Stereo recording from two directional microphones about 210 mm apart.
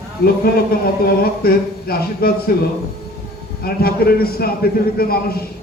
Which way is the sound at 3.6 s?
45° left (ahead or behind).